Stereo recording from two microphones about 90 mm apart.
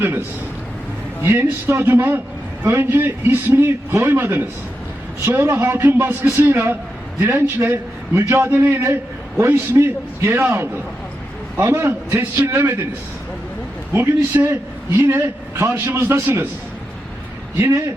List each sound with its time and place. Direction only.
1.2 s a man's voice: 25° right (ahead or behind)
13.9 s a man's voice: 25° right (ahead or behind)